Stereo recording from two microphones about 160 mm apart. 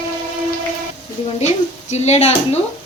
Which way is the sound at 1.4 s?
45° left (ahead or behind).